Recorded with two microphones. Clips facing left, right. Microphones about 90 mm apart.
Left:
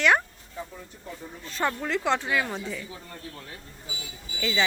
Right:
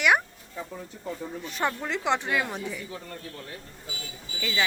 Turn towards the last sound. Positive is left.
turn(degrees=0)  # may be behind; listen again after turning